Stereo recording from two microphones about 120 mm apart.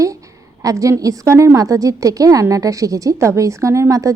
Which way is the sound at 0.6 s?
25° right (ahead or behind).